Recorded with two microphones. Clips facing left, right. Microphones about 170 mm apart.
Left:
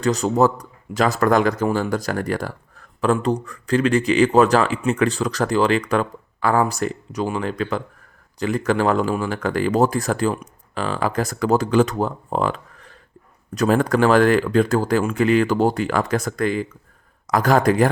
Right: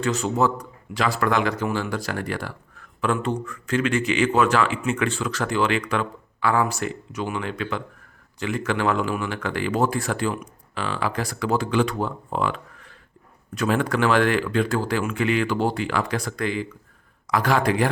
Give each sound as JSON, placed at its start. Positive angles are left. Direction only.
{"t": 0.0, "sound": "a man's voice", "side_deg": 40}